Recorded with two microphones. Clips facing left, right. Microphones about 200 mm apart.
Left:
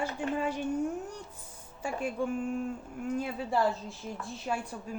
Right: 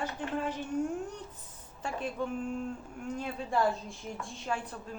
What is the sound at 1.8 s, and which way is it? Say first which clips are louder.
A woman's voice: left 3 dB; 10° left (ahead or behind).